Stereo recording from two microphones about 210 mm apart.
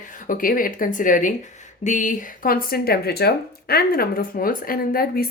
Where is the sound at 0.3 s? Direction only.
40° left (ahead or behind).